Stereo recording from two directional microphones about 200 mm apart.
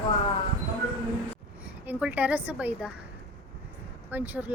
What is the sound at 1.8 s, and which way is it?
A woman's voice, 5° right (ahead or behind).